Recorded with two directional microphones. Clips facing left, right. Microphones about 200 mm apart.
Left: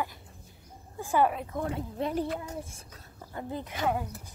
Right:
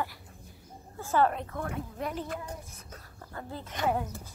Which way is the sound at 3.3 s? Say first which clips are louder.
Left 4 dB; 15° left (ahead or behind).